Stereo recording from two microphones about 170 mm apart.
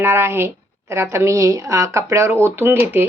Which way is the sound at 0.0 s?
15° right (ahead or behind).